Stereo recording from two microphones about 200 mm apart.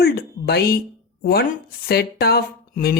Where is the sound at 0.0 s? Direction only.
50° left (ahead or behind).